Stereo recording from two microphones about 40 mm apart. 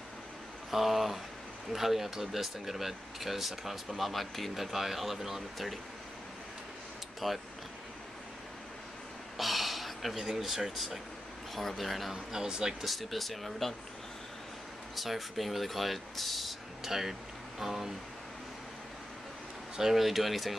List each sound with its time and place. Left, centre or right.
0.7 s speech: centre
7.2 s speech: centre
9.4 s a sound: centre
10.1 s speech: centre
12.1 s speech: centre
12.8 s speech: centre
15.0 s speech: centre
16.8 s speech: centre
19.8 s speech: centre